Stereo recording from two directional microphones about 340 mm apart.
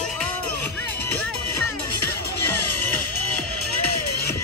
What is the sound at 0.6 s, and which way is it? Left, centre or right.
Music, left.